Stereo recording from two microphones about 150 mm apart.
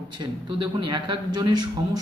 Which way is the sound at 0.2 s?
30° right (ahead or behind).